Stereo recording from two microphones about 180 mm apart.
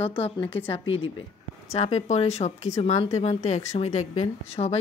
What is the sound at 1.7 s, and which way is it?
A woman's voice, 35° left (ahead or behind).